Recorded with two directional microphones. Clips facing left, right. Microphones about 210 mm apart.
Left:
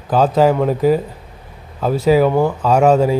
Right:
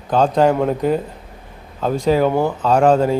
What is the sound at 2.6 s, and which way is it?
Speech, 5° left (ahead or behind).